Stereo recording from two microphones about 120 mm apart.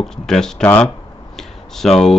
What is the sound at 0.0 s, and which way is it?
Speech, 5° left (ahead or behind).